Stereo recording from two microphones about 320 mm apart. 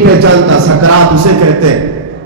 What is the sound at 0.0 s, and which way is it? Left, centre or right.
A man's voice, right.